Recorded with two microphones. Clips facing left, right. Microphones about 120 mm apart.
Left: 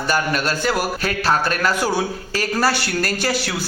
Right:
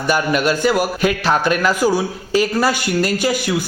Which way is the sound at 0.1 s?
15° right (ahead or behind).